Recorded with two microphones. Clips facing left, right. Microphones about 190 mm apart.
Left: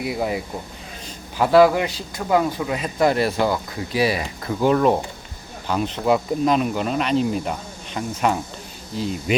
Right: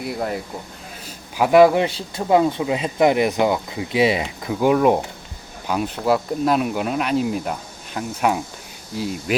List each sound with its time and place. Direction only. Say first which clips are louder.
0.0 s speech: left 1 dB; centre (ahead or behind)
1.0 s speech: right 1 dB; 15° right (ahead or behind)